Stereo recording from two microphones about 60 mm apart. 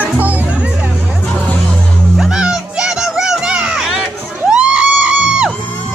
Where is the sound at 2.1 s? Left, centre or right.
Centre.